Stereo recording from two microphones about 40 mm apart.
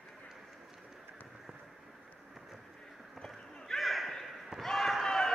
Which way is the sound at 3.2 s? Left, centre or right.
Centre.